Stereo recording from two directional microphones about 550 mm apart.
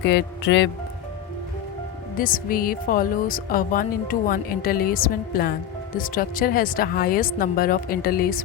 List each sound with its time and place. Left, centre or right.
0.0 s speech: centre
2.1 s speech: centre